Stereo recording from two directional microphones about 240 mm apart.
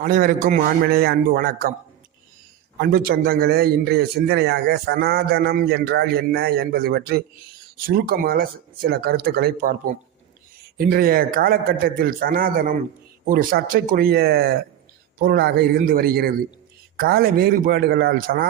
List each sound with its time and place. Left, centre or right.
0.0 s a man's voice: right
2.7 s a man's voice: right